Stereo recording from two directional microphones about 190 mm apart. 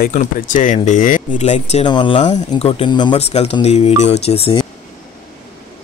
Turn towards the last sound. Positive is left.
turn(degrees=30)  # may be behind; listen again after turning